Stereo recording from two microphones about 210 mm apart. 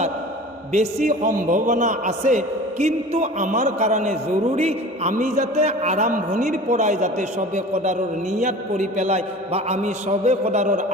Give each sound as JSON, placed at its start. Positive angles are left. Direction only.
{"t": 0.7, "sound": "a man's voice", "side_deg": -35}